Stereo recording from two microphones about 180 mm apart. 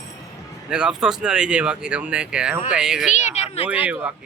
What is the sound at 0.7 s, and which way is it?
Speech, 5° right (ahead or behind).